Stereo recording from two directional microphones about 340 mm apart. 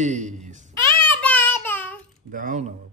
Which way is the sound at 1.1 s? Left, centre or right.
Centre.